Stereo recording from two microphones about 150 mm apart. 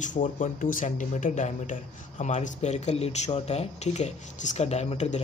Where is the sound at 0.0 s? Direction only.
55° left (ahead or behind).